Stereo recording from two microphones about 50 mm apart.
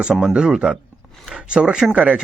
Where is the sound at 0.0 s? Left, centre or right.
Centre.